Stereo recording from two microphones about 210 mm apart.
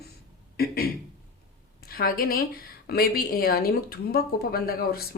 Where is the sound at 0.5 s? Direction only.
45° left (ahead or behind).